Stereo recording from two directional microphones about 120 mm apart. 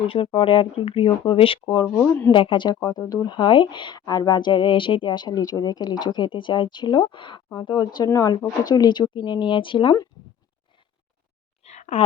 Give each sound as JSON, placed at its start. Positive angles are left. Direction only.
{"t": 0.0, "sound": "speech", "side_deg": 50}
{"t": 1.6, "sound": "speech", "side_deg": 35}
{"t": 2.3, "sound": "speech", "side_deg": 45}
{"t": 11.6, "sound": "a sound", "side_deg": 75}